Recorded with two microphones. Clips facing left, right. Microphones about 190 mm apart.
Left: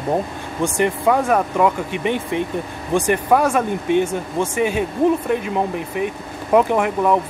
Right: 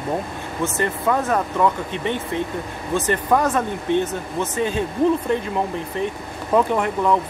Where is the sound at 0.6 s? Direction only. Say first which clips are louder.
Left 4 dB; 15° left (ahead or behind).